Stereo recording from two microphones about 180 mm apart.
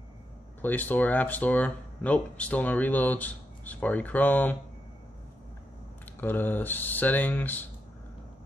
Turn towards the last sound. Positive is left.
turn(degrees=10)  # may be behind; listen again after turning